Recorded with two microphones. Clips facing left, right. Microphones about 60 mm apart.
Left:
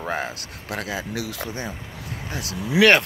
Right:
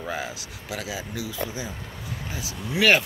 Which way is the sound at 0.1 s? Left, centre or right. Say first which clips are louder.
Left 5 dB; left.